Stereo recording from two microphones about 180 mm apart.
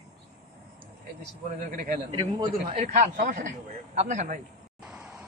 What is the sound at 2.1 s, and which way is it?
Speech, 20° right (ahead or behind).